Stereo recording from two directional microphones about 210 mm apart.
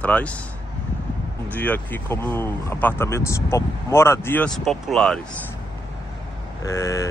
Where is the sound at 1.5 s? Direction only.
10° left (ahead or behind).